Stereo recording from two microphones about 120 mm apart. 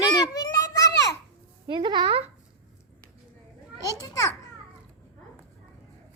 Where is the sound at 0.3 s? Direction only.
30° left (ahead or behind).